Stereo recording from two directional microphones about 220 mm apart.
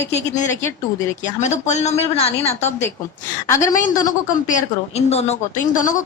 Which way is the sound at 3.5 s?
15° left (ahead or behind).